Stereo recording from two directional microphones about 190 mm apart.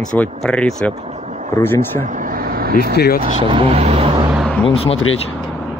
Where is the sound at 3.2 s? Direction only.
30° right (ahead or behind).